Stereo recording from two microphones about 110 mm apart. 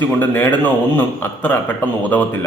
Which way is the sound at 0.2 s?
15° left (ahead or behind).